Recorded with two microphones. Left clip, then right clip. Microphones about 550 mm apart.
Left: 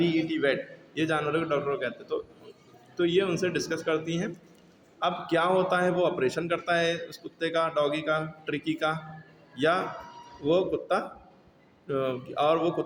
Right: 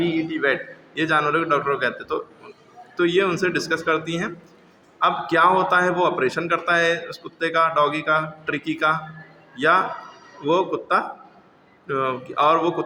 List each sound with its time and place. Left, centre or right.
0.0 s a man's voice: left